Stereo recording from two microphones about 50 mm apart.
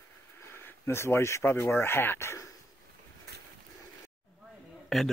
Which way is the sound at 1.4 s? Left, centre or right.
Left.